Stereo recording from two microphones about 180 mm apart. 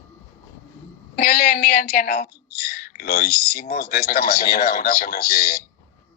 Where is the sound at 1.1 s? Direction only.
55° left (ahead or behind).